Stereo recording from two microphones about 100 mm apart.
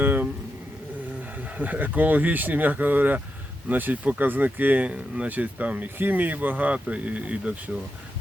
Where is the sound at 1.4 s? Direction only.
15° right (ahead or behind).